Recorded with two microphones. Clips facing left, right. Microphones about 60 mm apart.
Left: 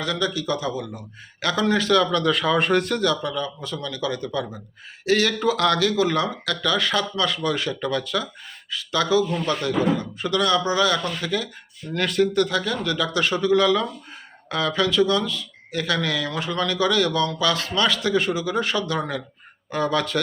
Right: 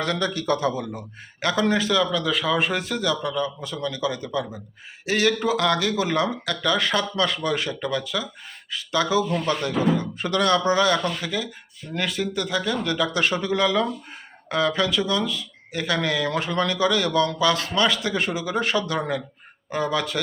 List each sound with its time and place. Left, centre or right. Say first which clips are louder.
0.0 s a man's voice: even; right; by 2.0 s centre
2.0 s a man's voice: left 2 dB; centre
3.2 s speech: right 1 dB; right
7.8 s speech: left 2 dB; centre
8.7 s speech: left 1 dB; right
11.2 s speech: left 2 dB; centre